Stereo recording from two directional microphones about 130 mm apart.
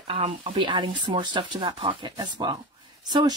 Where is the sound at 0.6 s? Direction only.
40° right (ahead or behind).